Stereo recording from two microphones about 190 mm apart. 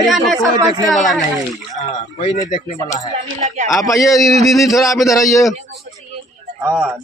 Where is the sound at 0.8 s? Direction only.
Centre (ahead or behind).